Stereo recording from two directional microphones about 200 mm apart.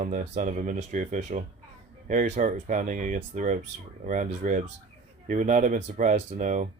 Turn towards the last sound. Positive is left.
turn(degrees=-40)  # may be behind; listen again after turning